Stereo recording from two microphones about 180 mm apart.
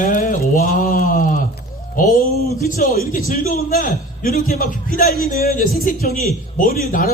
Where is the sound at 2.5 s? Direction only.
55° left (ahead or behind).